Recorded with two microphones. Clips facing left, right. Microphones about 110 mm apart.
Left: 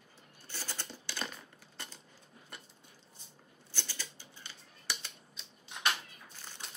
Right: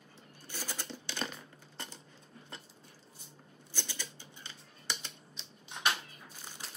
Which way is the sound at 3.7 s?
20° right (ahead or behind).